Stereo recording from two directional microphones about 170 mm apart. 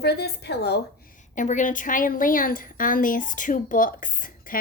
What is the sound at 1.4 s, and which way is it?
A woman's voice, 50° left (ahead or behind).